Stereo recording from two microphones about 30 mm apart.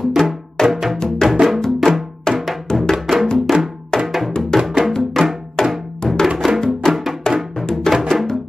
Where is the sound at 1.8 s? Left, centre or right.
Centre.